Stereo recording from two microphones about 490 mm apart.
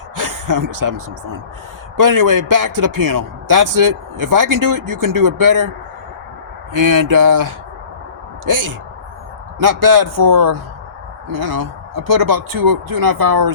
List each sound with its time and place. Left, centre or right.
0.2 s a man's voice: right
6.8 s a man's voice: right